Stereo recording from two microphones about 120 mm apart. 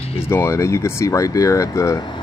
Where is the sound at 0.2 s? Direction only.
20° left (ahead or behind).